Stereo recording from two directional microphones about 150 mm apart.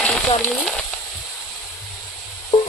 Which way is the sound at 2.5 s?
30° left (ahead or behind).